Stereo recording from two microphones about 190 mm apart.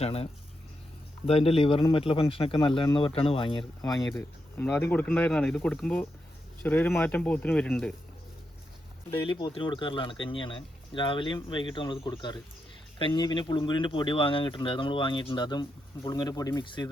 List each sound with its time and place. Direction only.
0.0 s speech: 30° left (ahead or behind)
1.3 s speech: 30° left (ahead or behind)
3.8 s speech: 5° left (ahead or behind)
9.2 s speech: 25° left (ahead or behind)